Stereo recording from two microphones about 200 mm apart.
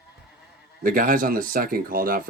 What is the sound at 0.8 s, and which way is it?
Speech, 45° right (ahead or behind).